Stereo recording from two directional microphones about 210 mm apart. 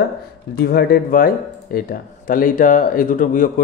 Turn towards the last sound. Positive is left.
turn(degrees=40)  # may be behind; listen again after turning